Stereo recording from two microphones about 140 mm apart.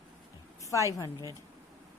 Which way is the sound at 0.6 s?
20° left (ahead or behind).